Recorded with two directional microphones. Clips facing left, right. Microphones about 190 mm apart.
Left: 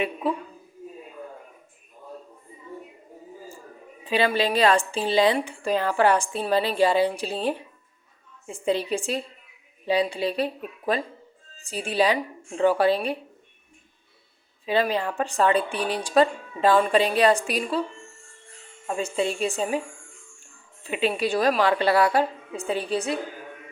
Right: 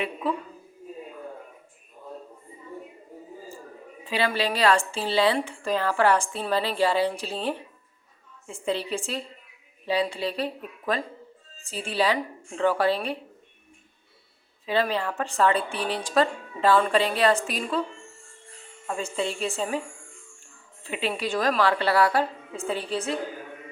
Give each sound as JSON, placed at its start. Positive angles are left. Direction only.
{"t": 0.0, "sound": "speech", "side_deg": 10}
{"t": 4.0, "sound": "speech", "side_deg": 20}
{"t": 14.7, "sound": "speech", "side_deg": 15}
{"t": 18.9, "sound": "speech", "side_deg": 15}
{"t": 20.8, "sound": "speech", "side_deg": 15}